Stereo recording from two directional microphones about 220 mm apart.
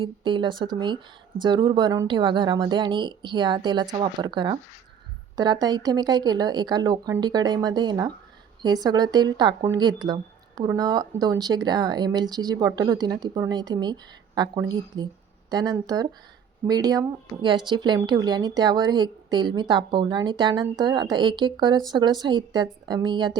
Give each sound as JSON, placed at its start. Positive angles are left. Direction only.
{"t": 0.0, "sound": "speech", "side_deg": -20}